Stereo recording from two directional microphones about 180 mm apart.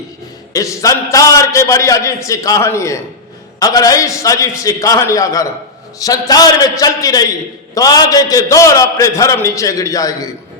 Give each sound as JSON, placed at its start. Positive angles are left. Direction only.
{"t": 0.5, "sound": "a man's voice", "side_deg": 20}